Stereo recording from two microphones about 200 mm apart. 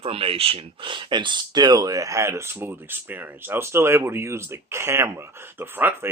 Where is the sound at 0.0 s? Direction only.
30° right (ahead or behind).